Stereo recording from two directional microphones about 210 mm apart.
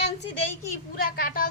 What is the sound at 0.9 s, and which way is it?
Speech, 45° left (ahead or behind).